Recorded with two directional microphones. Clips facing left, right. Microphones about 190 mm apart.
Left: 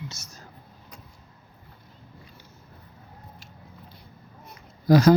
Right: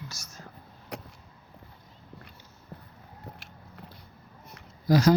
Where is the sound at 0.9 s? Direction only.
75° right (ahead or behind).